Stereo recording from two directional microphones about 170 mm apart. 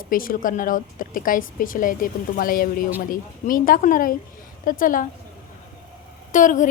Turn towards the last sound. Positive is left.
turn(degrees=50)  # may be behind; listen again after turning